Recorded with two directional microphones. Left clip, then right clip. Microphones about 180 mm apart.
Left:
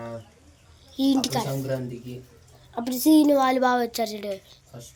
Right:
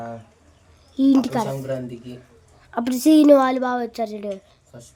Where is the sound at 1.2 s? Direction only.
35° right (ahead or behind).